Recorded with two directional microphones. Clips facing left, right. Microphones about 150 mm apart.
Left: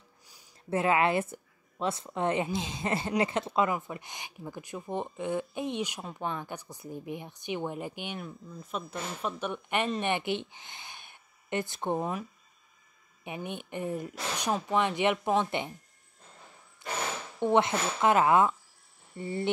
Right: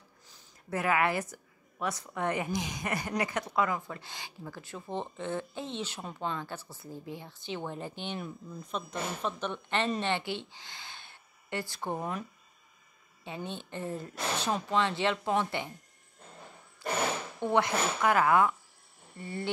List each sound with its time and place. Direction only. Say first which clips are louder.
0.7 s a woman's voice: left 3 dB; 25° left (ahead or behind)
13.2 s speech: left 1 dB; 15° left (ahead or behind)
16.8 s a sound: right 3 dB; 20° left (ahead or behind)
17.4 s a woman's voice: left 3 dB; 20° left (ahead or behind)